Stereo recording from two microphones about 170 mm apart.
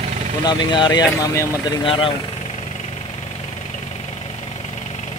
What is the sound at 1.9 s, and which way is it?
Speech, 30° left (ahead or behind).